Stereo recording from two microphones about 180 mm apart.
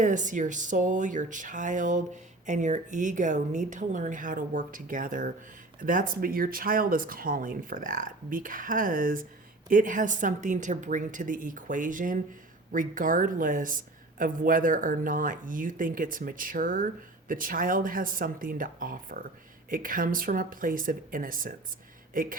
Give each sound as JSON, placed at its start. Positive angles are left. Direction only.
{"t": 0.0, "sound": "speech", "side_deg": -45}